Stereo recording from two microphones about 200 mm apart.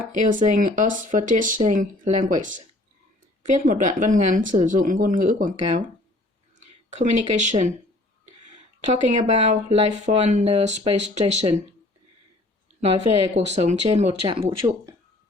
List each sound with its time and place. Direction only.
0.1 s speech: 40° right (ahead or behind)
8.9 s speech: 35° right (ahead or behind)
13.3 s speech: 35° right (ahead or behind)
14.4 s speech: 15° right (ahead or behind)